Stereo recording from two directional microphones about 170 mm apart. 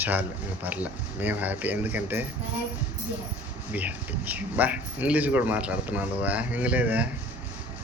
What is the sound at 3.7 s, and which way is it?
Speech, 10° right (ahead or behind).